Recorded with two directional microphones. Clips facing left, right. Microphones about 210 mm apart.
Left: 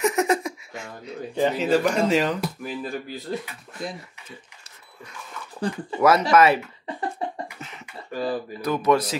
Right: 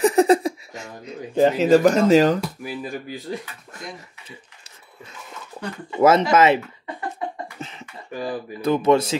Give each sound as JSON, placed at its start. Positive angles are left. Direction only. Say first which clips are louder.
{"t": 0.0, "sound": "a sound", "louder": "right 6 dB", "side_deg": -35}
{"t": 1.3, "sound": "speech", "louder": "right 6 dB", "side_deg": -45}
{"t": 2.6, "sound": "speech", "louder": "even", "side_deg": -10}
{"t": 5.9, "sound": "speech", "louder": "right 2 dB", "side_deg": -25}
{"t": 7.2, "sound": "cough", "louder": "right 3 dB", "side_deg": 30}
{"t": 8.1, "sound": "speech", "louder": "left 1 dB", "side_deg": -15}
{"t": 8.5, "sound": "speech", "louder": "right 4 dB", "side_deg": -25}